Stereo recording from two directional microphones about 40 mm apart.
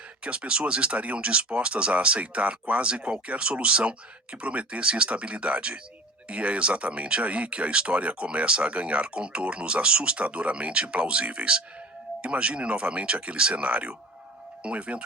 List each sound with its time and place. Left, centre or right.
0.2 s speech: right